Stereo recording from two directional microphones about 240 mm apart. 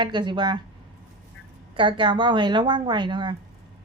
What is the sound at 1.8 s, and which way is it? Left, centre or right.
A woman's voice, right.